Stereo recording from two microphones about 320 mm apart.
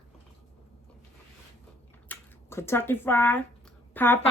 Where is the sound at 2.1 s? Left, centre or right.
Centre.